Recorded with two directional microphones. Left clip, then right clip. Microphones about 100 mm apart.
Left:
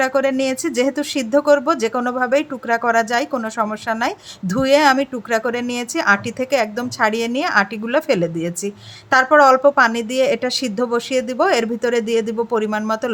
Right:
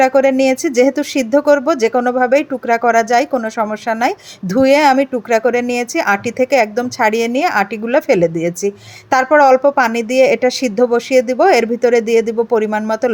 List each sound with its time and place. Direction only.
0.0 s a woman's voice: 30° right (ahead or behind)